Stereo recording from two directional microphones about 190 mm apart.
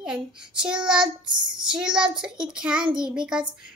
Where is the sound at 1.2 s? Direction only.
25° right (ahead or behind).